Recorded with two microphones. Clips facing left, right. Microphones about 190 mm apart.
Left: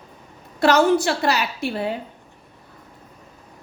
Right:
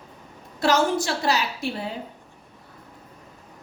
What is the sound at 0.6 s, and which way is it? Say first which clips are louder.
A woman's voice: left 5 dB; 65° left (ahead or behind).